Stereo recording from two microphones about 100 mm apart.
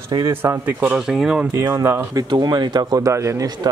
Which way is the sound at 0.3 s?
20° right (ahead or behind).